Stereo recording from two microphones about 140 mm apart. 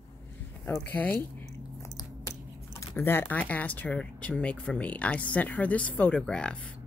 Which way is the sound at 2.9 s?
15° left (ahead or behind).